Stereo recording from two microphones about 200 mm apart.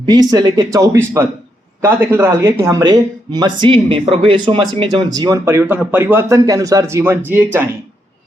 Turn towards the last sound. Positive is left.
turn(degrees=-10)  # may be behind; listen again after turning